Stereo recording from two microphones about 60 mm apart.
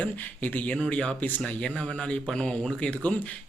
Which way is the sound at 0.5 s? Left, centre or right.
Left.